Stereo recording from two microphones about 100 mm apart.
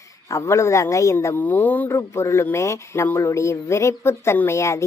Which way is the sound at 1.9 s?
30° left (ahead or behind).